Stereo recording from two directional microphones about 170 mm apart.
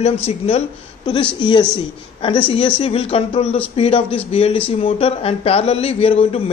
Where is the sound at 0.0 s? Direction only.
40° left (ahead or behind).